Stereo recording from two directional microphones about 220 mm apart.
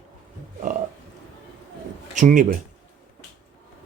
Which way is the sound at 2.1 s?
35° right (ahead or behind).